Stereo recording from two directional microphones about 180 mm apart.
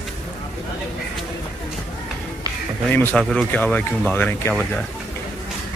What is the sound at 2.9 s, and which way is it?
Speech, 10° left (ahead or behind).